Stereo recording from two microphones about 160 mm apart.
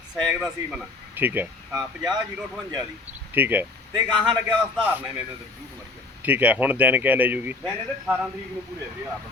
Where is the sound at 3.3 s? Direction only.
10° right (ahead or behind).